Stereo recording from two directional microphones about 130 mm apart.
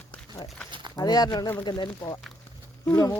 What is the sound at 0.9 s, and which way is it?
Speech, 30° left (ahead or behind).